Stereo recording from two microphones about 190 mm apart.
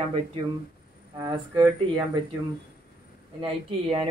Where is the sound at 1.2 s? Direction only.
20° right (ahead or behind).